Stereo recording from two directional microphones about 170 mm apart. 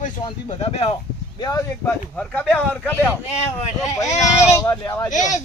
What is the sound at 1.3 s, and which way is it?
Speech, 25° left (ahead or behind).